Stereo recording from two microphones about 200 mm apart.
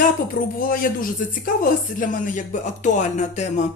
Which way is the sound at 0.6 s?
45° left (ahead or behind).